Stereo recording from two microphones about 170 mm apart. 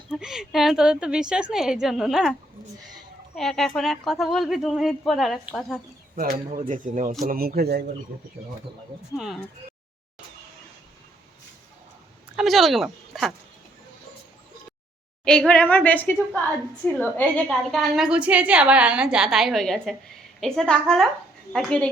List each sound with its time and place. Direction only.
0.1 s a woman's voice: 5° right (ahead or behind)
3.3 s a woman's voice: centre (ahead or behind)
6.1 s speech: 55° right (ahead or behind)
9.1 s a woman's voice: centre (ahead or behind)
12.4 s a woman's voice: centre (ahead or behind)
15.2 s a woman's voice: 5° left (ahead or behind)